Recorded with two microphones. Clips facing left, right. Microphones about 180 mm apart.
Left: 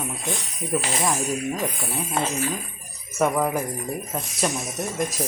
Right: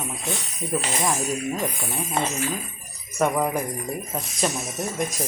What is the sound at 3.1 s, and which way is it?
Speech, centre (ahead or behind).